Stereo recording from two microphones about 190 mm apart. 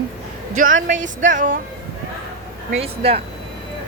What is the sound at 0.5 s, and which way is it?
A woman's voice, 45° right (ahead or behind).